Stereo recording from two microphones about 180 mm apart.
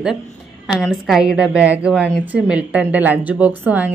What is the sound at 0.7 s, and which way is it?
A woman's voice, centre (ahead or behind).